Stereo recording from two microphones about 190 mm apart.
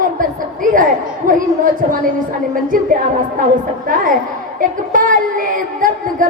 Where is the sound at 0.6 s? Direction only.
45° right (ahead or behind).